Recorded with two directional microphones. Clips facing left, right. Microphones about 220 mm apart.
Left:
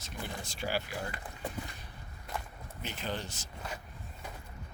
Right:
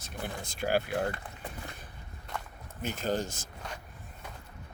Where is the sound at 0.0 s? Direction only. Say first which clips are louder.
Right 3 dB; 55° right (ahead or behind).